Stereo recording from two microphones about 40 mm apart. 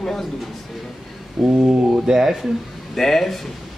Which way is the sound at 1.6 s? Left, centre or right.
Right.